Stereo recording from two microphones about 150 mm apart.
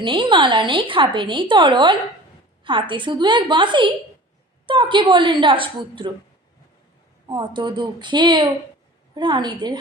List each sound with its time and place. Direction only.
0.0 s speech: 35° right (ahead or behind)
7.3 s a woman's voice: 30° right (ahead or behind)